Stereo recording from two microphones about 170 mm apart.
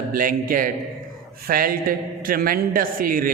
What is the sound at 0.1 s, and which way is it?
A man's voice, 55° right (ahead or behind).